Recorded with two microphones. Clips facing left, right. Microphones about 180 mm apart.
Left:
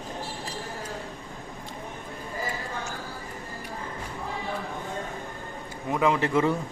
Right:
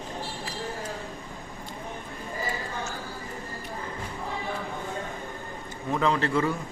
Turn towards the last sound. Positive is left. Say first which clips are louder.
# left 2 dB
turn(degrees=20)  # may be behind; listen again after turning